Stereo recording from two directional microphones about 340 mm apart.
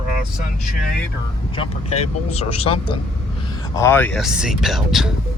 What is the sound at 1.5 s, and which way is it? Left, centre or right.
Speech, centre.